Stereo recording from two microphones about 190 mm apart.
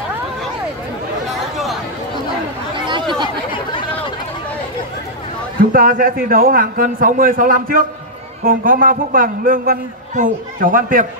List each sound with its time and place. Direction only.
2.9 s chatter: 25° right (ahead or behind)
5.6 s a man's voice: 50° right (ahead or behind)